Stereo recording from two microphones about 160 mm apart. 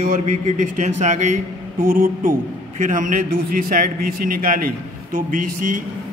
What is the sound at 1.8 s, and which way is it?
A man's voice, 60° right (ahead or behind).